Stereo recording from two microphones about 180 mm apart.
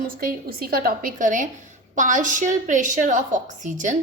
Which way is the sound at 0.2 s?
55° right (ahead or behind).